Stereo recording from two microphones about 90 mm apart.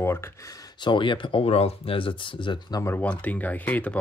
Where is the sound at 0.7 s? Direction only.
65° left (ahead or behind).